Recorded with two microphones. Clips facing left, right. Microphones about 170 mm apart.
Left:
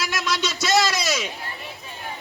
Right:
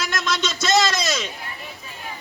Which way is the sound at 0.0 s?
5° left (ahead or behind).